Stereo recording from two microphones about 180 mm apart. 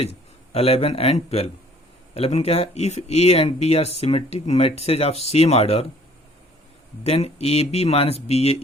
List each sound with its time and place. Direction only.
0.0 s speech: 35° left (ahead or behind)
7.0 s speech: 35° left (ahead or behind)